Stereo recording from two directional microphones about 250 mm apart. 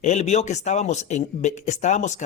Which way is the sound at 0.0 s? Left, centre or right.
Left.